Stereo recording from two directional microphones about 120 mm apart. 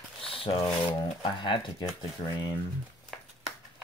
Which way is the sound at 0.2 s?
50° left (ahead or behind).